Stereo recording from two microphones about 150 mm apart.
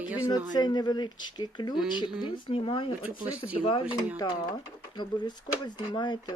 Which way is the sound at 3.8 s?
5° right (ahead or behind).